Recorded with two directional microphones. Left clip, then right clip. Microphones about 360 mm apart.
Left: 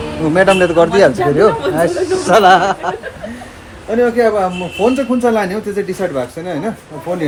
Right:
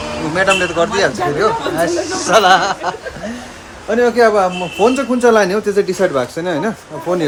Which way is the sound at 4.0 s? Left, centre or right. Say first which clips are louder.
Right 1 dB; centre.